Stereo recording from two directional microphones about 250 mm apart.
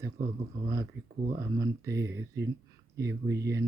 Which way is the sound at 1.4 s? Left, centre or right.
Centre.